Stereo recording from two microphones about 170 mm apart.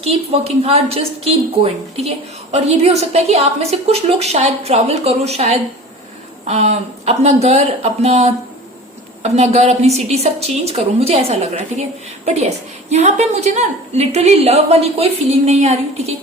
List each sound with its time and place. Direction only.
0.0 s a woman's voice: 35° right (ahead or behind)